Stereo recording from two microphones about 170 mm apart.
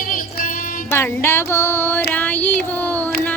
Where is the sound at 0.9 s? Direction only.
15° left (ahead or behind).